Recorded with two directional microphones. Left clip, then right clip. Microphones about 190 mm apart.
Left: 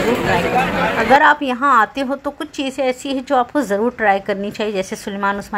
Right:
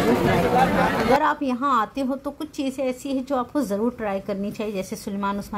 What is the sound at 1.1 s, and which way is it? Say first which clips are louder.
A woman's voice: left 9 dB; 20° left (ahead or behind).